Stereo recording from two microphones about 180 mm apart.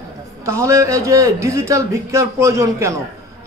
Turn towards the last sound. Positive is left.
turn(degrees=-15)  # may be behind; listen again after turning